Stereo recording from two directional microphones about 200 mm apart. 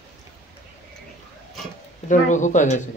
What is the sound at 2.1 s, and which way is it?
Speech, 40° left (ahead or behind).